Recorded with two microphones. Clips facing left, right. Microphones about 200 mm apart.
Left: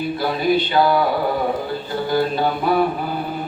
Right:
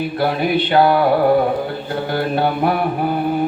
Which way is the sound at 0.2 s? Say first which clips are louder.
Right 2 dB; 60° right (ahead or behind).